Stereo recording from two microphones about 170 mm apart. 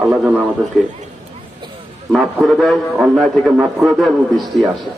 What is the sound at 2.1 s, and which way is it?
A man's voice, centre (ahead or behind).